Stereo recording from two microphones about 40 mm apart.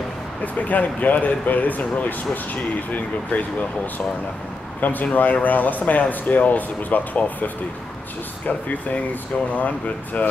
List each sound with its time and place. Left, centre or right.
0.6 s speech: left